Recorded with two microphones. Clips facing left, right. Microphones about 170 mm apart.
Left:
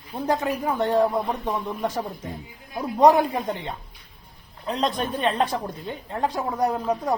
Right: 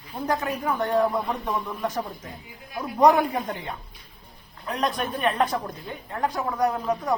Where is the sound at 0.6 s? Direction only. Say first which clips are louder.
Left 2 dB; 30° left (ahead or behind).